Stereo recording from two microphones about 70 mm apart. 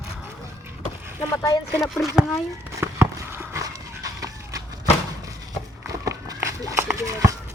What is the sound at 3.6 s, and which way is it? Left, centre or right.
Dog, right.